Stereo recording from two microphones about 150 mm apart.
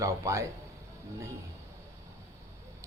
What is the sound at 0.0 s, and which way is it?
Speech, 20° right (ahead or behind).